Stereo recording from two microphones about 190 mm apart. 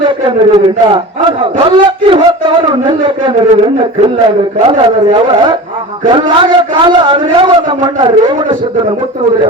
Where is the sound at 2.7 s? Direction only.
25° right (ahead or behind).